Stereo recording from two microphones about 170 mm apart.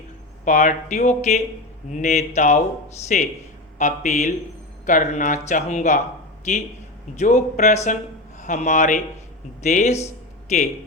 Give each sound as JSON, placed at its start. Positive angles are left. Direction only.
{"t": 0.4, "sound": "a man's voice", "side_deg": 45}